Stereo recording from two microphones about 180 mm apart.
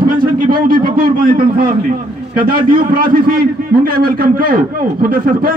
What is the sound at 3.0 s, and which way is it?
A man's voice, 50° right (ahead or behind).